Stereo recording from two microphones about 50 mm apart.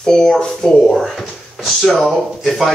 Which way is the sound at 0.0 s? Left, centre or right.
Centre.